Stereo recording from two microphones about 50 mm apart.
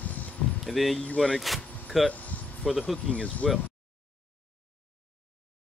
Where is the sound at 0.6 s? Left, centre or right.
Centre.